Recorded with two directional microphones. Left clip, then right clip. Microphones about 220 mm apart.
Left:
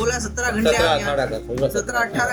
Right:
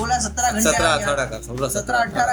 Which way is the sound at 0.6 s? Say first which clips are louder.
Left 2 dB; 40° right (ahead or behind).